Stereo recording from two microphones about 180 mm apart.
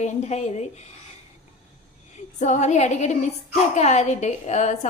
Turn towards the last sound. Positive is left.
turn(degrees=40)  # may be behind; listen again after turning